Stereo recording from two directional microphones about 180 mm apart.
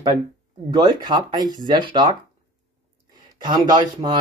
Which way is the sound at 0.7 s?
20° right (ahead or behind).